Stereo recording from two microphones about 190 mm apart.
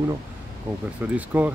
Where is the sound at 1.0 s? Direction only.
10° right (ahead or behind).